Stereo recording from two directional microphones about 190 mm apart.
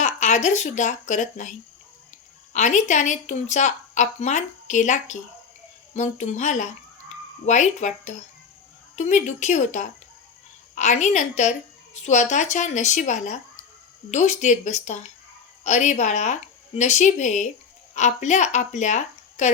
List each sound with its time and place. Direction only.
0.0 s a woman's voice: 40° left (ahead or behind)